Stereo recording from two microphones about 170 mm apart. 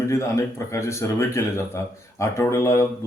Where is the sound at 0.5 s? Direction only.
15° left (ahead or behind).